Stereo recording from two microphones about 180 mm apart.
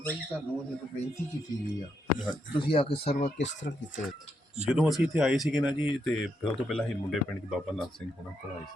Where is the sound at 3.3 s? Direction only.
80° left.